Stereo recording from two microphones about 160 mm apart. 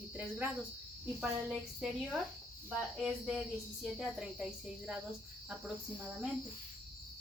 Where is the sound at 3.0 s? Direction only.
5° right (ahead or behind).